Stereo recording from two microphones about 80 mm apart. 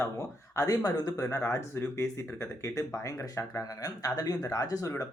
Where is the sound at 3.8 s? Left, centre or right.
Left.